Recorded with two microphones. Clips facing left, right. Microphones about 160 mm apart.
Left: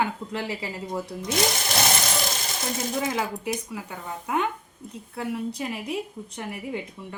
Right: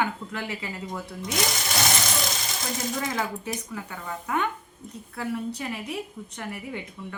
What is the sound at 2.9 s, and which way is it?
Speech, 25° left (ahead or behind).